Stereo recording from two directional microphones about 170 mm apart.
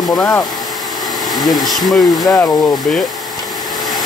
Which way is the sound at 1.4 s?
25° left (ahead or behind).